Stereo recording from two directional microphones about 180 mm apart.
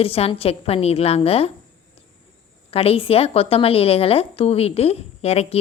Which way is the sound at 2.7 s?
30° left (ahead or behind).